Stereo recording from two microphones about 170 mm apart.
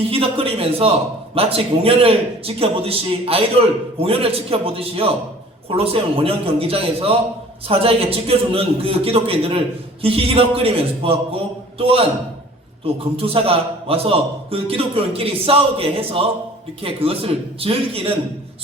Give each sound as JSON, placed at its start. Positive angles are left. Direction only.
{"t": 0.0, "sound": "a man's voice", "side_deg": -35}